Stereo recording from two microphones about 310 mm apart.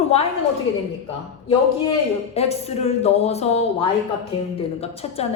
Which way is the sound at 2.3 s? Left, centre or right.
Centre.